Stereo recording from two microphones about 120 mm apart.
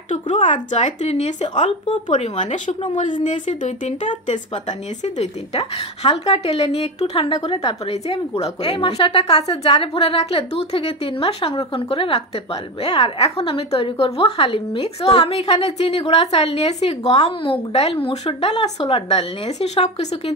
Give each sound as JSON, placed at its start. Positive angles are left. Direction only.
{"t": 0.1, "sound": "speech", "side_deg": 90}
{"t": 2.0, "sound": "a woman's voice", "side_deg": 90}
{"t": 5.0, "sound": "a woman's voice", "side_deg": 70}
{"t": 17.1, "sound": "a woman's voice", "side_deg": 45}